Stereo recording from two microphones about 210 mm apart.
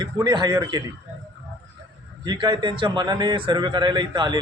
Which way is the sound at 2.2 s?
20° right (ahead or behind).